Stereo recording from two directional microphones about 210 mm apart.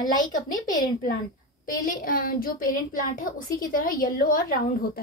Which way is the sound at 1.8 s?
40° left (ahead or behind).